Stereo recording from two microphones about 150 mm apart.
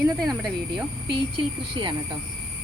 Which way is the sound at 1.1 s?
35° right (ahead or behind).